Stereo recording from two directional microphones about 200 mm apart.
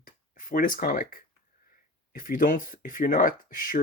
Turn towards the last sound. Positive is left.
turn(degrees=45)  # may be behind; listen again after turning